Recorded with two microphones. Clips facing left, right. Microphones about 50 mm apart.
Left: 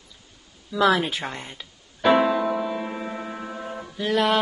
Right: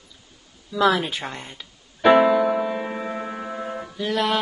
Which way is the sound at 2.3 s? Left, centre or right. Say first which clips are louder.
Right 4 dB; centre.